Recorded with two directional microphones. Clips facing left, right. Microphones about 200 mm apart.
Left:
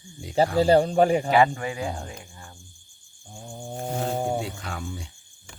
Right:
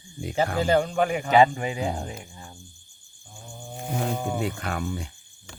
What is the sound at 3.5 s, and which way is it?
Speech, 30° left (ahead or behind).